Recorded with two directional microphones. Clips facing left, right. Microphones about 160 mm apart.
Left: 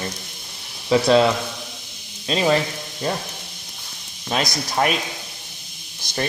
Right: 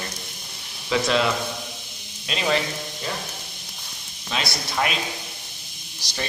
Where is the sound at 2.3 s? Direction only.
40° left (ahead or behind).